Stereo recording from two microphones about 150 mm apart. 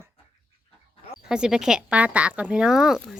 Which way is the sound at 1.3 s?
5° right (ahead or behind).